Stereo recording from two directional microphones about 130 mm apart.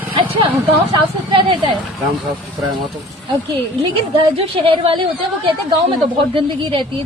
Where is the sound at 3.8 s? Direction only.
45° right (ahead or behind).